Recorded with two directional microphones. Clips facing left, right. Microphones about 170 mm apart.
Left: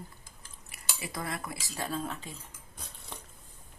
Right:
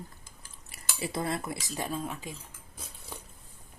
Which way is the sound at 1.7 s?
15° right (ahead or behind).